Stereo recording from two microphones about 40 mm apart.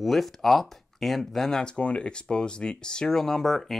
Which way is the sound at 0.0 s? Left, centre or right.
Centre.